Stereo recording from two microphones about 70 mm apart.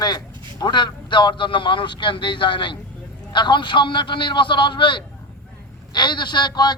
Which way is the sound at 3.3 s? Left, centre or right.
Left.